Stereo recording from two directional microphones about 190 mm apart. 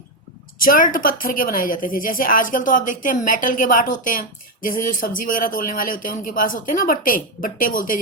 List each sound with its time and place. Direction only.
0.6 s a woman's voice: 45° left (ahead or behind)